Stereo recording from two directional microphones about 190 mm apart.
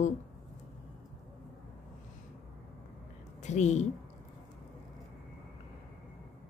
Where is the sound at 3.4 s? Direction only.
35° left (ahead or behind).